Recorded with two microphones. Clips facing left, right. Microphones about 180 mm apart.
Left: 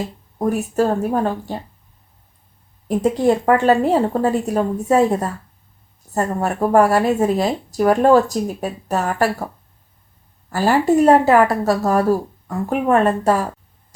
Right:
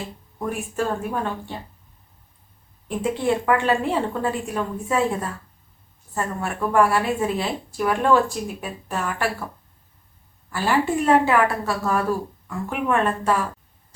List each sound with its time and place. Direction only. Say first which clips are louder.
0.0 s speech: left 8 dB; 40° left (ahead or behind)
2.8 s speech: left 7 dB; 40° left (ahead or behind)
10.5 s speech: left 6 dB; 40° left (ahead or behind)